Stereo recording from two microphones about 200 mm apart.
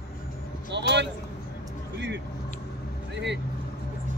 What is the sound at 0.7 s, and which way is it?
Speech, 60° right (ahead or behind).